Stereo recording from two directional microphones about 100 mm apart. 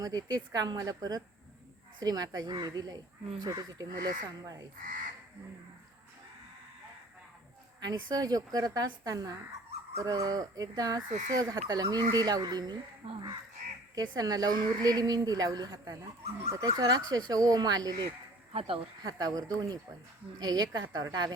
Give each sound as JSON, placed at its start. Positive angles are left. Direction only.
{"t": 0.0, "sound": "speech", "side_deg": -40}
{"t": 7.8, "sound": "speech", "side_deg": -40}
{"t": 13.1, "sound": "a woman's voice", "side_deg": -55}
{"t": 13.9, "sound": "speech", "side_deg": -40}
{"t": 18.5, "sound": "speech", "side_deg": -70}
{"t": 19.0, "sound": "a woman's voice", "side_deg": -40}